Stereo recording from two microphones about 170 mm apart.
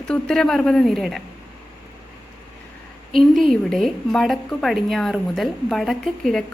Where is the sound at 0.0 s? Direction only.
5° left (ahead or behind).